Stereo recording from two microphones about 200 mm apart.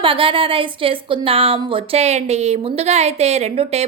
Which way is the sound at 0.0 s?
25° right (ahead or behind).